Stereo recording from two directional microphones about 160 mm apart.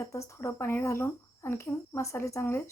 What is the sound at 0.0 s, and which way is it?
Speech, 20° left (ahead or behind).